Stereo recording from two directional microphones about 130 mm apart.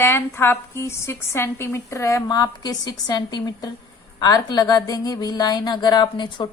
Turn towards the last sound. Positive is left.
turn(degrees=35)  # may be behind; listen again after turning